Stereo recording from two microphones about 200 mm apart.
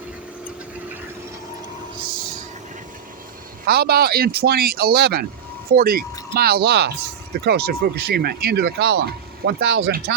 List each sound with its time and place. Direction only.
3.7 s speech: 50° right (ahead or behind)